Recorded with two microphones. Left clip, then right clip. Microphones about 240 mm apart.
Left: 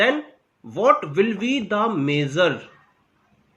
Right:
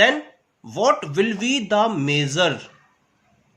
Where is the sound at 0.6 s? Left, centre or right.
Right.